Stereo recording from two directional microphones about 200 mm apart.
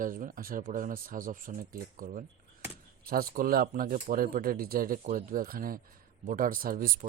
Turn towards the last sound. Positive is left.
turn(degrees=-45)  # may be behind; listen again after turning